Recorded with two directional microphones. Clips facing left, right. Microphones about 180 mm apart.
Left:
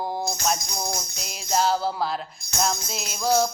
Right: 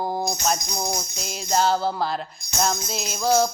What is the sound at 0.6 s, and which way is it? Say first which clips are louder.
Jingle bell: right 3 dB; 20° right (ahead or behind).